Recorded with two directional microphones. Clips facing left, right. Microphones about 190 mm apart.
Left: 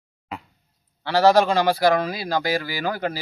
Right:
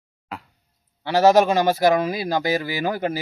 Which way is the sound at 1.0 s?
20° right (ahead or behind).